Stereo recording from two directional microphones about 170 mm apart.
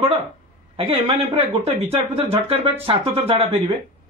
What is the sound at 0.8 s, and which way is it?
A man's voice, 35° right (ahead or behind).